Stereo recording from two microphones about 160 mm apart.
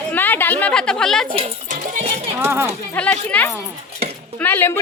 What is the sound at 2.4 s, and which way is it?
Speech, 15° right (ahead or behind).